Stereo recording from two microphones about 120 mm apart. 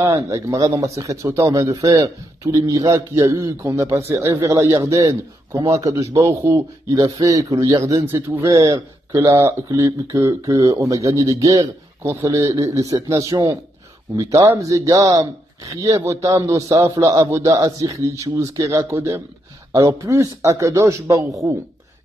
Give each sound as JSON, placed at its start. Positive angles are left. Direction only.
{"t": 0.0, "sound": "speech", "side_deg": -25}